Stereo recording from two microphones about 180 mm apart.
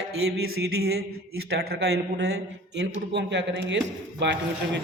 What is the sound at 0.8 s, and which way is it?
A man's voice, 60° right (ahead or behind).